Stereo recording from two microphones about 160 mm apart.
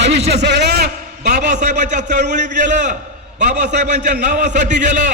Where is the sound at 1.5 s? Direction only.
50° right (ahead or behind).